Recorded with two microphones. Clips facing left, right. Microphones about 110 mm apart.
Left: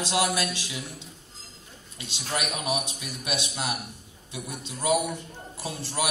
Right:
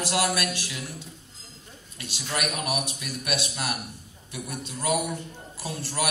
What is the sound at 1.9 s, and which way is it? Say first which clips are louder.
A man's voice: even; 20° left (ahead or behind).